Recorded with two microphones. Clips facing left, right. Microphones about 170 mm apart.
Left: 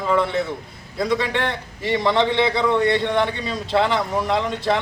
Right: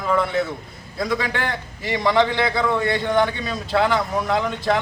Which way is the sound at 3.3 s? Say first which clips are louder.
Left 1 dB; 25° left (ahead or behind).